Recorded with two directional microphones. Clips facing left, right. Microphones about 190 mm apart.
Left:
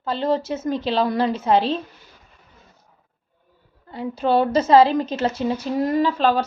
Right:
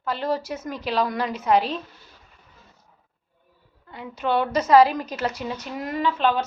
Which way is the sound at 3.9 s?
30° left (ahead or behind).